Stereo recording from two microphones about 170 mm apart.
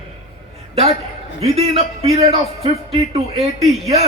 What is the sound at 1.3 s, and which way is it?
A man's voice, 35° right (ahead or behind).